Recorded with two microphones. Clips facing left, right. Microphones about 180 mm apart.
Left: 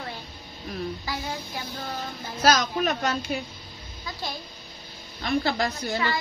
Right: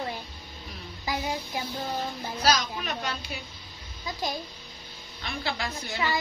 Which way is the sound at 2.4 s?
45° left (ahead or behind).